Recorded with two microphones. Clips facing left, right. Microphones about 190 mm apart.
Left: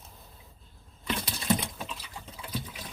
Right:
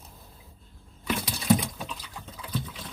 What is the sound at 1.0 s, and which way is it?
Liquid, centre (ahead or behind).